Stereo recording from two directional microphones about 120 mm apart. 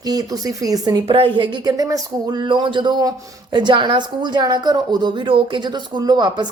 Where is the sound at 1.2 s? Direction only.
45° right (ahead or behind).